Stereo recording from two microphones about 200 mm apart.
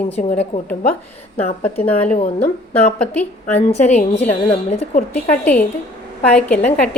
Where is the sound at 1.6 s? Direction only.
10° left (ahead or behind).